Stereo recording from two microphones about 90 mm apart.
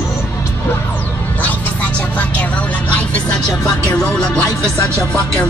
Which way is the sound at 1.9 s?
15° left (ahead or behind).